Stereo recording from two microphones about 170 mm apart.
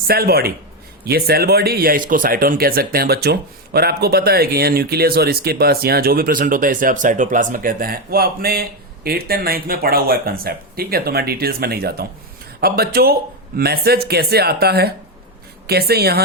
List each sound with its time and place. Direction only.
0.1 s speech: 65° right (ahead or behind)